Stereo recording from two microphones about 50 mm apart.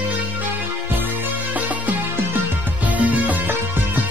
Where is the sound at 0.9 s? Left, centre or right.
Right.